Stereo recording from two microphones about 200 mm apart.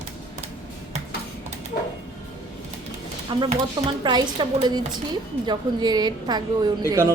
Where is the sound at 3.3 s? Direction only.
20° right (ahead or behind).